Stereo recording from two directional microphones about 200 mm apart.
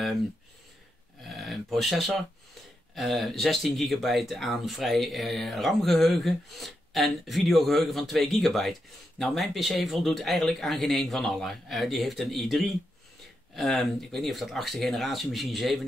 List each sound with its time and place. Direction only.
1.2 s speech: centre (ahead or behind)